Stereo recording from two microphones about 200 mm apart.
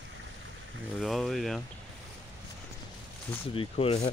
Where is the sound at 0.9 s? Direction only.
Centre (ahead or behind).